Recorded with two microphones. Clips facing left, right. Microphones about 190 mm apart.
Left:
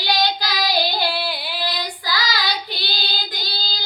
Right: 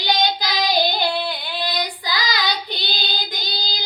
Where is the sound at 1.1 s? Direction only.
5° left (ahead or behind).